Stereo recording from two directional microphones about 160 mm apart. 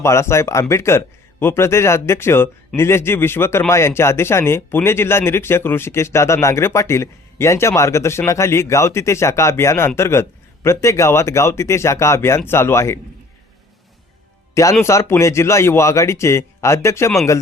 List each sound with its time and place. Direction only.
0.0 s a man's voice: 15° left (ahead or behind)
14.5 s a man's voice: 20° left (ahead or behind)